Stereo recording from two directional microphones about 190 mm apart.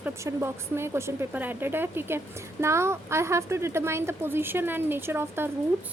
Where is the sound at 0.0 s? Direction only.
15° right (ahead or behind).